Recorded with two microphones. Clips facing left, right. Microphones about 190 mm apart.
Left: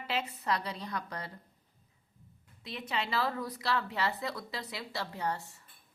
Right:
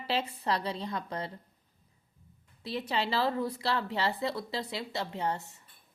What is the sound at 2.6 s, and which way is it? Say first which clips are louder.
A woman's voice: right 5 dB; 35° right (ahead or behind).